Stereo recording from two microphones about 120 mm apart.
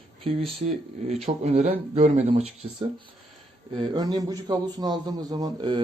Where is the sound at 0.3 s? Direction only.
55° right (ahead or behind).